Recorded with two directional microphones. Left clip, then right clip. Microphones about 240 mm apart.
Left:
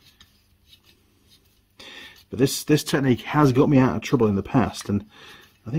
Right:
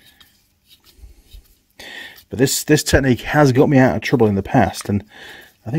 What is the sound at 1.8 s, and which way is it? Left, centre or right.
Speech, right.